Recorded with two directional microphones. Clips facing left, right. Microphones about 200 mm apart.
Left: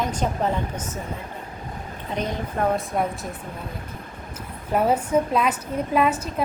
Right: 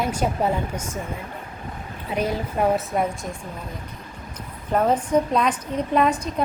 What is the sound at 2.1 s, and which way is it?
Speech, 10° right (ahead or behind).